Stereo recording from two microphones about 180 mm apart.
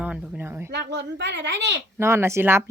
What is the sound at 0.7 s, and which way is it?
Speech, 70° right (ahead or behind).